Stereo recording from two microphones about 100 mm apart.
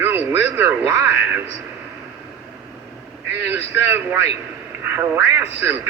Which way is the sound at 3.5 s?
25° right (ahead or behind).